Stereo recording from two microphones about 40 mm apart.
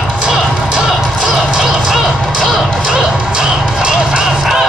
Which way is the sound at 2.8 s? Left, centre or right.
Centre.